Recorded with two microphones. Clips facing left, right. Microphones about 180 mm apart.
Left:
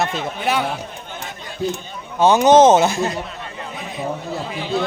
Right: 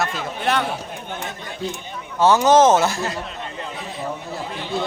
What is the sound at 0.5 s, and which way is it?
Speech, 5° left (ahead or behind).